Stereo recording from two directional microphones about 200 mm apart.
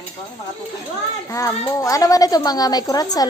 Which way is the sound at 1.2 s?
15° left (ahead or behind).